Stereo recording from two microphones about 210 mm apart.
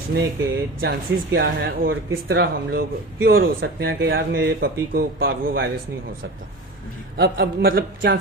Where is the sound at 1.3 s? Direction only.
50° right (ahead or behind).